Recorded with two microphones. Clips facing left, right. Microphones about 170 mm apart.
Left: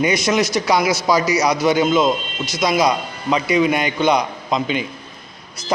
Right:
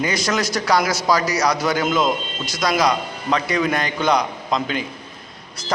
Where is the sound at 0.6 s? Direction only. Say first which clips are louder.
Left 2 dB; 10° left (ahead or behind).